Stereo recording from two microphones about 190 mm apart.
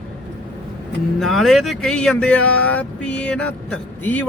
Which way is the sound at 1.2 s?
Centre (ahead or behind).